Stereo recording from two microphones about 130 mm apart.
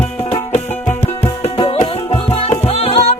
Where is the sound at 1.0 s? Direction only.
50° left (ahead or behind).